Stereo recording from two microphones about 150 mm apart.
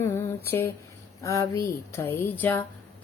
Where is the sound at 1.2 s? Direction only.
20° left (ahead or behind).